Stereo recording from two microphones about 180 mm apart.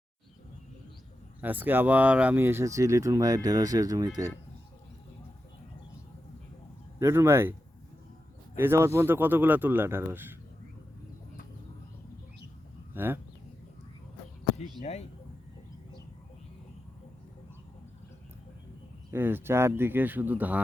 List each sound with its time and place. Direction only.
1.4 s speech: 10° right (ahead or behind)
7.0 s speech: 15° right (ahead or behind)
8.5 s speech: 15° right (ahead or behind)
12.9 s speech: 10° right (ahead or behind)
14.8 s speech: 35° left (ahead or behind)
19.1 s speech: 10° right (ahead or behind)